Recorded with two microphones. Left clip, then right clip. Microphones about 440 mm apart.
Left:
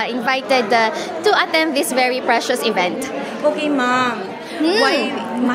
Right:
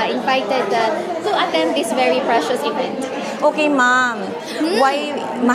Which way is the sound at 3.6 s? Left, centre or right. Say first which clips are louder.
Right 3 dB; right.